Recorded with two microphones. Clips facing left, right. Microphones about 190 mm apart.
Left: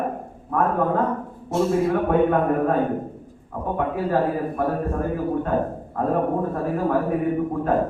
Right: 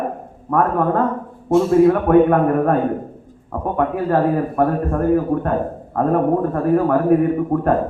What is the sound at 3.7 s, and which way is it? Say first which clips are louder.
A man's voice: right 4 dB; 60° right (ahead or behind).